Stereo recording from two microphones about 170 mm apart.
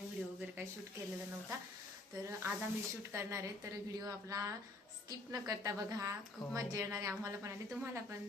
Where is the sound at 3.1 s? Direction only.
15° right (ahead or behind).